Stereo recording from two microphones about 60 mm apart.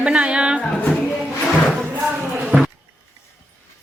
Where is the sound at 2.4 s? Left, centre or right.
Centre.